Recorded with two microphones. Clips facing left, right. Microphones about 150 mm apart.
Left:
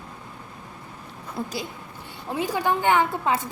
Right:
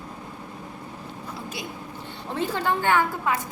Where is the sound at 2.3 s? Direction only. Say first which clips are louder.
Left 1 dB; 10° left (ahead or behind).